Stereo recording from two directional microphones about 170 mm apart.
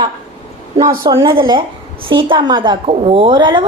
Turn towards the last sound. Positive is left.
turn(degrees=-30)  # may be behind; listen again after turning